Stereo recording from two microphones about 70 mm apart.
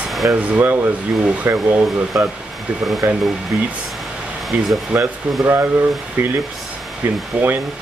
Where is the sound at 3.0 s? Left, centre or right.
Right.